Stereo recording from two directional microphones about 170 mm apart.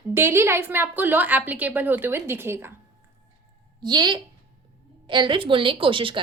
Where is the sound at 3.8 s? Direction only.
25° right (ahead or behind).